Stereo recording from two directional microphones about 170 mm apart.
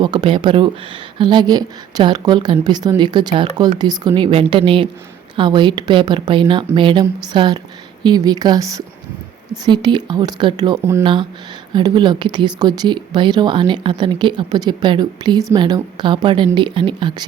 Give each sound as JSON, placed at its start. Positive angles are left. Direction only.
{"t": 0.0, "sound": "speech", "side_deg": -25}